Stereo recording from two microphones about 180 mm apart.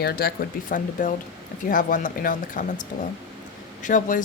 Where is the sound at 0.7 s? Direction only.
45° left (ahead or behind).